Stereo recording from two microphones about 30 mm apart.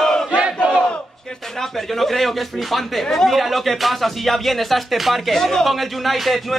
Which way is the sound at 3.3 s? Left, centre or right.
Centre.